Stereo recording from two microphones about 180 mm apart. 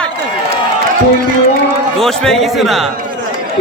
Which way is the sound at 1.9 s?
Centre (ahead or behind).